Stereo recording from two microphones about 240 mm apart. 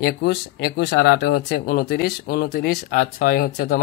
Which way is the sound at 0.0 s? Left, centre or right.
Left.